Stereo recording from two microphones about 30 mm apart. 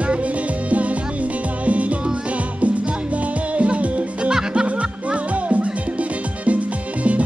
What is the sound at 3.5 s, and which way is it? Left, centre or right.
Music, right.